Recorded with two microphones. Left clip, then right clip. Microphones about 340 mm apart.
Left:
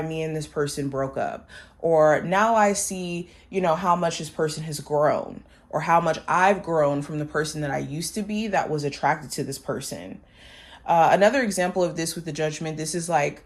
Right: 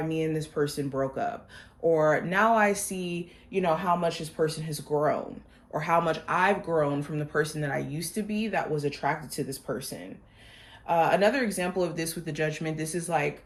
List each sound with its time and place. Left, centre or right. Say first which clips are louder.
0.1 s speech: left 1 dB; left